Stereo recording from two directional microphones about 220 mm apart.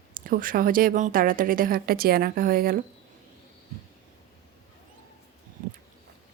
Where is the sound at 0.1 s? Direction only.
40° right (ahead or behind).